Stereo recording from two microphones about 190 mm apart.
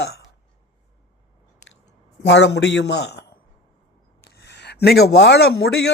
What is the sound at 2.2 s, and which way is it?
A man's voice, 65° left (ahead or behind).